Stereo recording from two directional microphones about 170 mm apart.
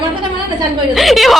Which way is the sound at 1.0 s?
Centre (ahead or behind).